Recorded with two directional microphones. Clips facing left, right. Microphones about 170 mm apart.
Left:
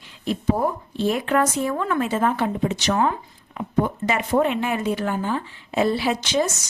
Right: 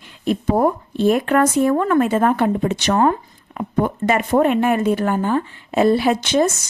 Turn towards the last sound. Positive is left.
turn(degrees=-55)  # may be behind; listen again after turning